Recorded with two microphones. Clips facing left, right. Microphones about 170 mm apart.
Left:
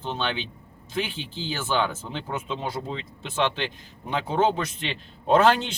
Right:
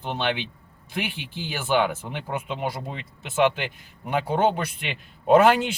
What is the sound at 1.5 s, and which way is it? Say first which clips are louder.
Speech: right 3 dB; 15° right (ahead or behind).